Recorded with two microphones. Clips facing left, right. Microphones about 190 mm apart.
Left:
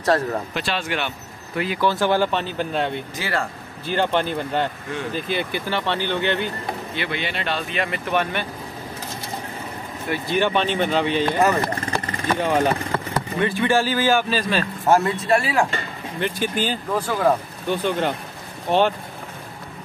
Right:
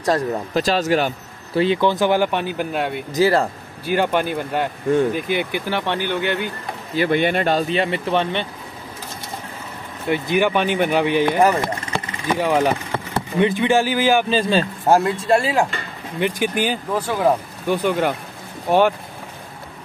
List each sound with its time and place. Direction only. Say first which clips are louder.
0.6 s speech: right 8 dB; 40° right (ahead or behind); by 3.0 s 10° right (ahead or behind)
3.2 s speech: right 12 dB; 40° right (ahead or behind)
3.8 s speech: right 2 dB; 10° right (ahead or behind)
7.0 s speech: right 13 dB; 50° right (ahead or behind); by 8.5 s 25° right (ahead or behind)
10.0 s speech: right 3 dB; 20° right (ahead or behind)
11.9 s vehicle: right 1 dB; 10° right (ahead or behind)
13.1 s speech: right 6 dB; 20° right (ahead or behind)
14.5 s speech: right 1 dB; 25° right (ahead or behind)
16.2 s speech: right 3 dB; 15° right (ahead or behind)